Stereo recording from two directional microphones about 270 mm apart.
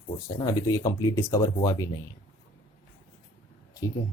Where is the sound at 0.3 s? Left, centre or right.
Centre.